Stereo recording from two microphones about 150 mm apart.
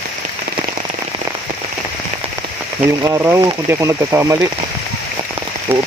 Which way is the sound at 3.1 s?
20° right (ahead or behind).